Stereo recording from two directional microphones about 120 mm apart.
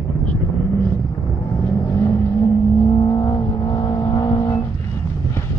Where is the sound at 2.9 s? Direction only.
35° left (ahead or behind).